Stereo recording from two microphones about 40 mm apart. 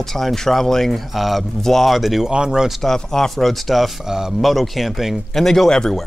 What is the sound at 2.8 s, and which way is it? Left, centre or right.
Speech, centre.